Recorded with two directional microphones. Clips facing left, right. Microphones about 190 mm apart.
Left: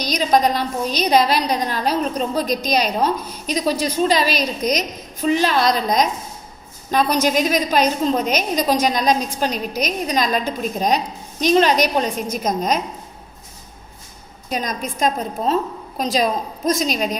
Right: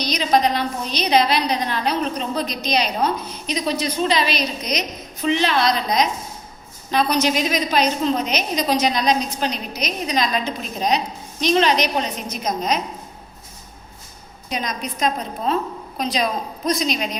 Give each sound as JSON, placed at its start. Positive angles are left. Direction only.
{"t": 0.0, "sound": "a woman's voice", "side_deg": 45}
{"t": 14.5, "sound": "a woman's voice", "side_deg": 45}
{"t": 16.6, "sound": "a woman's voice", "side_deg": 45}